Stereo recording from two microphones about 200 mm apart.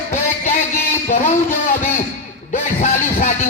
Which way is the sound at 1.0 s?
35° left (ahead or behind).